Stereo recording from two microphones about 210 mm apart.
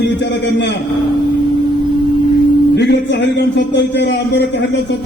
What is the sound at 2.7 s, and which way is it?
A man's voice, 55° left (ahead or behind).